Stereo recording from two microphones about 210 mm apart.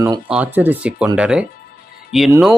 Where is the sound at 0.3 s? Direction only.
5° right (ahead or behind).